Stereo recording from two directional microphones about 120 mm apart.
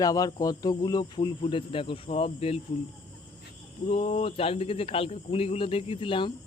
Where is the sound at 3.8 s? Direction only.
60° left (ahead or behind).